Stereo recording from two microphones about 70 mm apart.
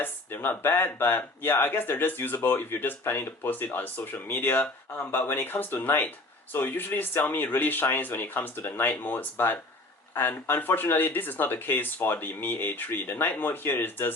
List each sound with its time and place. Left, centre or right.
0.0 s speech: left